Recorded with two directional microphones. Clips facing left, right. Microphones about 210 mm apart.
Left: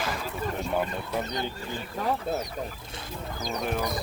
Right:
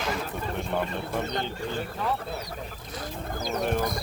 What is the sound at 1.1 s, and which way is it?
Speech, 55° right (ahead or behind).